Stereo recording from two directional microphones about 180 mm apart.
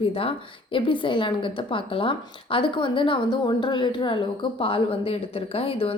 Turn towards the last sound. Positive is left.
turn(degrees=30)  # may be behind; listen again after turning